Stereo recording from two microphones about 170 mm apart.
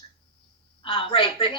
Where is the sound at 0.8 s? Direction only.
25° left (ahead or behind).